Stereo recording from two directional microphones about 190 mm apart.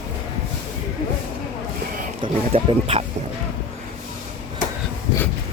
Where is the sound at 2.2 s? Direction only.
30° right (ahead or behind).